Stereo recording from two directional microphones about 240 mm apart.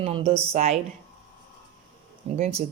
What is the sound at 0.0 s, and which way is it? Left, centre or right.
Speech, right.